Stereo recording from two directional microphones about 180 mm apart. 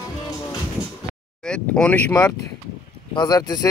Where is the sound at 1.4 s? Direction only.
5° left (ahead or behind).